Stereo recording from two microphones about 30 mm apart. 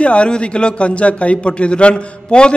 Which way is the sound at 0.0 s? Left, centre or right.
Left.